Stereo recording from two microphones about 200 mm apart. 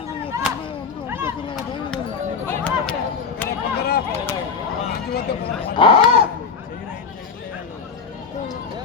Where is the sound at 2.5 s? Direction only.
5° left (ahead or behind).